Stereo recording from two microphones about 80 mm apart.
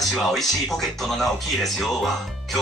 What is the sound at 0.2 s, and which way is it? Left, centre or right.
Speech, centre.